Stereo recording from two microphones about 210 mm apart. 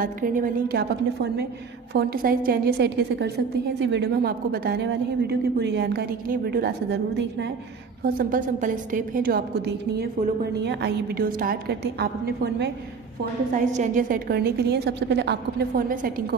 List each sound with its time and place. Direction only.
0.0 s a woman's voice: 40° right (ahead or behind)
8.0 s a woman's voice: 40° right (ahead or behind)
13.7 s a woman's voice: 35° right (ahead or behind); by 15.8 s 55° right (ahead or behind)
15.9 s a woman's voice: 40° right (ahead or behind)